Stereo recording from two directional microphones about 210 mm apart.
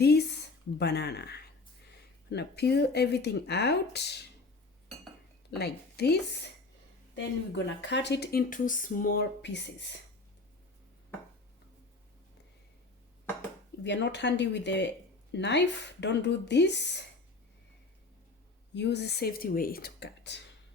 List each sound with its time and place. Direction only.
0.0 s a sound: 50° left (ahead or behind)
0.8 s speech: 50° left (ahead or behind)
5.5 s a woman's voice: 50° left (ahead or behind)
7.2 s speech: 55° left (ahead or behind)
13.8 s speech: 55° left (ahead or behind)
18.7 s speech: 55° left (ahead or behind)